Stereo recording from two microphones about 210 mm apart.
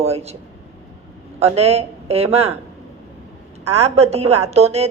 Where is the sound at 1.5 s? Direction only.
30° right (ahead or behind).